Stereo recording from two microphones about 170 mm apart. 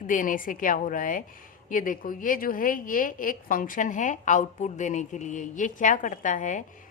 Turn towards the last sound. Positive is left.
turn(degrees=50)  # may be behind; listen again after turning